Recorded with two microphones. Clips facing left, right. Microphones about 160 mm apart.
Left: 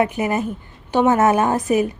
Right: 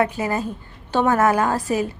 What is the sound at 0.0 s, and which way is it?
A woman's voice, 20° left (ahead or behind).